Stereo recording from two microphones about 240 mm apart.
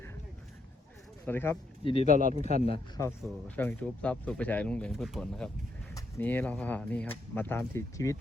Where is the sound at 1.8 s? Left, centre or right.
Left.